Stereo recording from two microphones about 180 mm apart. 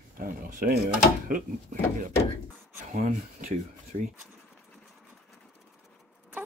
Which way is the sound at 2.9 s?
40° right (ahead or behind).